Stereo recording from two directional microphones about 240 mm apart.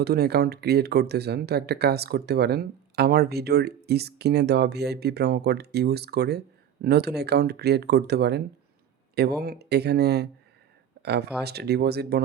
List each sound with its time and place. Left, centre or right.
0.0 s speech: right